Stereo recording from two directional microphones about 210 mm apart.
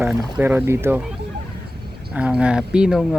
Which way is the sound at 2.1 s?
5° right (ahead or behind).